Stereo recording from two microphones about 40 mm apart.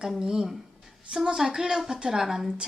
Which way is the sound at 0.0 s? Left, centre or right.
Centre.